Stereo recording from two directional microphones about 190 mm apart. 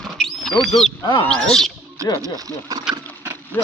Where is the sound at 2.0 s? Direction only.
15° right (ahead or behind).